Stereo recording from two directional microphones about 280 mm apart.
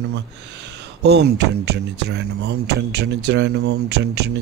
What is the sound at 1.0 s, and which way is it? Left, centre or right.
Speech, right.